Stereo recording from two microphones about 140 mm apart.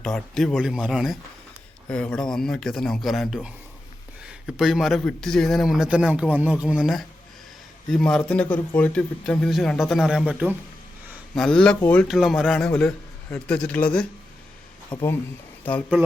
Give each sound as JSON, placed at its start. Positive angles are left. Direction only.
{"t": 0.0, "sound": "speech", "side_deg": 5}
{"t": 11.3, "sound": "speech", "side_deg": 5}
{"t": 14.9, "sound": "speech", "side_deg": 40}